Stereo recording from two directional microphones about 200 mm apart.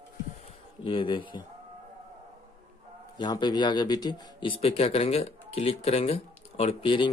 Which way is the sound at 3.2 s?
20° left (ahead or behind).